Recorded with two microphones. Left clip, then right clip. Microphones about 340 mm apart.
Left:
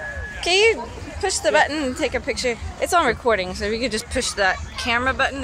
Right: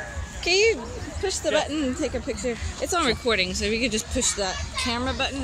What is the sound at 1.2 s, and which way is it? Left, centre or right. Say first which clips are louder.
Speech: left 6 dB; left.